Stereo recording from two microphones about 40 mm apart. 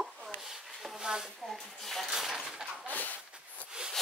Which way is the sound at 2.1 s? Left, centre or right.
Centre.